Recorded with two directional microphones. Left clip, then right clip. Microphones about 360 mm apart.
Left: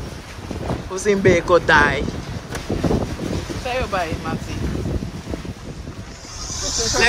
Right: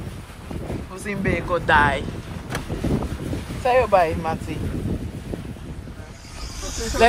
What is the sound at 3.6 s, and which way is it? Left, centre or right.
Speech, right.